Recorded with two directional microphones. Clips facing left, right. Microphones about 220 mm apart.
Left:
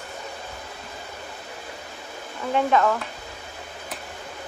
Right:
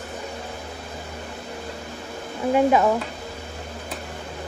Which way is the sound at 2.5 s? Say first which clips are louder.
Right 3 dB; 15° right (ahead or behind).